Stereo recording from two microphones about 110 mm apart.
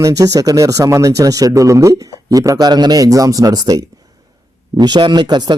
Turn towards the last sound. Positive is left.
turn(degrees=-40)  # may be behind; listen again after turning